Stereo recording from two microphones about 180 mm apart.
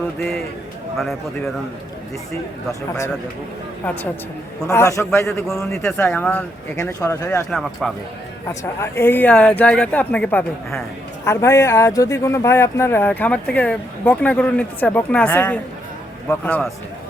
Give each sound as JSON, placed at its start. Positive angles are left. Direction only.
{"t": 0.2, "sound": "speech", "side_deg": 0}
{"t": 4.7, "sound": "speech", "side_deg": 15}
{"t": 5.7, "sound": "speech", "side_deg": 5}
{"t": 7.5, "sound": "speech", "side_deg": 0}
{"t": 8.4, "sound": "speech", "side_deg": 15}
{"t": 11.3, "sound": "speech", "side_deg": 15}